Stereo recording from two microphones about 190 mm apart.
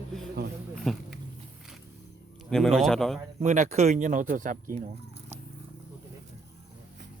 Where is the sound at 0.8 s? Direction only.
5° left (ahead or behind).